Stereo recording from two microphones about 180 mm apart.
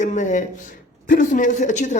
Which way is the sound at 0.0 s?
45° left (ahead or behind).